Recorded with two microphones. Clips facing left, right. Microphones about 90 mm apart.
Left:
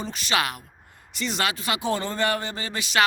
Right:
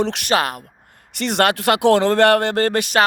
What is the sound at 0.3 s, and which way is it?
Speech, 45° right (ahead or behind).